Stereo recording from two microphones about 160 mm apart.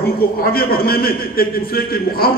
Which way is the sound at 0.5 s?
70° left (ahead or behind).